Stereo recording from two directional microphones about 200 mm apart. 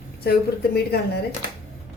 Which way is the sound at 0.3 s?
50° left (ahead or behind).